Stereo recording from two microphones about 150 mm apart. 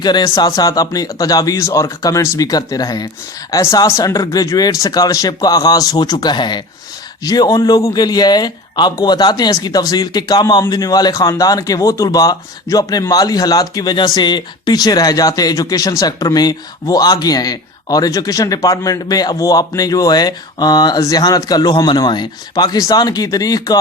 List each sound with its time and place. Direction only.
0.0 s a man's voice: 30° left (ahead or behind)